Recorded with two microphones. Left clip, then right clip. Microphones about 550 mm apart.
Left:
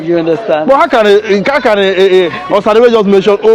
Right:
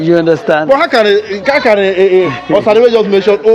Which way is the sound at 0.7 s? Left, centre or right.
Left.